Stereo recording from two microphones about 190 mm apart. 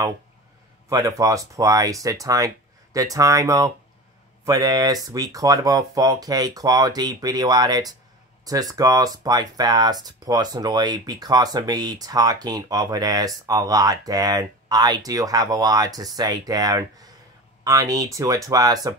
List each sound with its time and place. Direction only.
0.8 s speech: 20° right (ahead or behind)